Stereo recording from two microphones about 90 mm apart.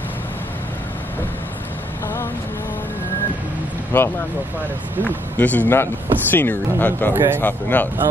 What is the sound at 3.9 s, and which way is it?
Speech, 20° left (ahead or behind).